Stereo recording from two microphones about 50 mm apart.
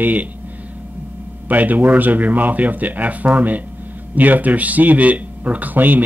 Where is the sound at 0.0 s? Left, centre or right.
Right.